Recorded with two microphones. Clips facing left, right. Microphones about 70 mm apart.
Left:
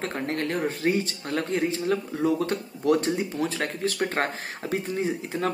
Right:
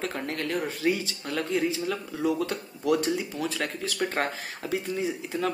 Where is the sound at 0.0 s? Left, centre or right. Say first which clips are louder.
Left 3 dB; left.